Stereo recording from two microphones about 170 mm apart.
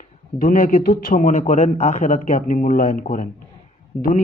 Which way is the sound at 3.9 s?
Centre (ahead or behind).